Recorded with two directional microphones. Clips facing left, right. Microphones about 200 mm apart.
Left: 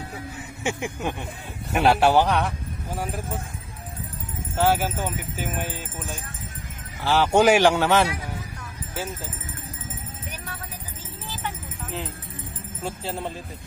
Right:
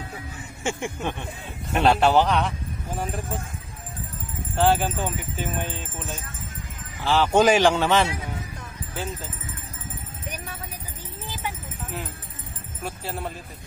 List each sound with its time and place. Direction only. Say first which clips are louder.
0.7 s speech: even; 15° left (ahead or behind)
4.7 s speech: even; 10° left (ahead or behind)
12.8 s speech: left 1 dB; 25° left (ahead or behind)